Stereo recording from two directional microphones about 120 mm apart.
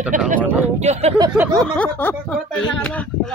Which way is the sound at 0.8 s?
65° right (ahead or behind).